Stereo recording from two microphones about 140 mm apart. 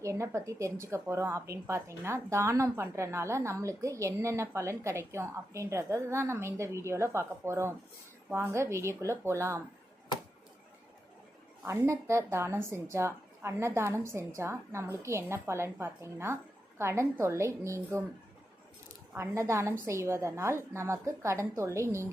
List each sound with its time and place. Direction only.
0.0 s a woman's voice: 20° right (ahead or behind)
11.6 s a woman's voice: 20° right (ahead or behind)
19.1 s a woman's voice: 20° right (ahead or behind)